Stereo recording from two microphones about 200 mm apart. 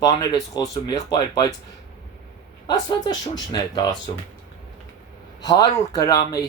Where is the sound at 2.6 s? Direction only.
20° left (ahead or behind).